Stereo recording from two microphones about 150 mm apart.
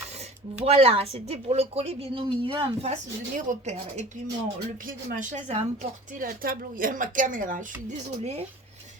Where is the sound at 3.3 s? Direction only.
55° right (ahead or behind).